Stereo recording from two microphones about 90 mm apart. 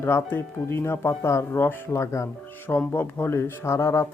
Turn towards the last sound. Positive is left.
turn(degrees=30)  # may be behind; listen again after turning